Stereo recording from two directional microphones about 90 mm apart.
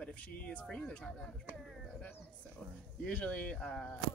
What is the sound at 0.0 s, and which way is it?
Speech, 15° left (ahead or behind).